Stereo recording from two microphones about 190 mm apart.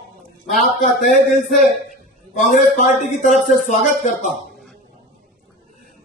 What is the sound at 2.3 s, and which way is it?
Speech, 40° left (ahead or behind).